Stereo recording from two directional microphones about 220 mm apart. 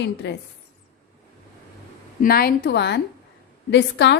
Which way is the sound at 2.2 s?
45° left (ahead or behind).